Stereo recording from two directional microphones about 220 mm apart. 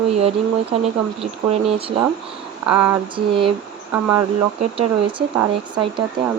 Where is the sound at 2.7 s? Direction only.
10° right (ahead or behind).